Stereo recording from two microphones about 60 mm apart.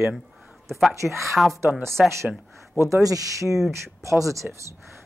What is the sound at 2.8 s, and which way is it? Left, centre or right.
Speech, right.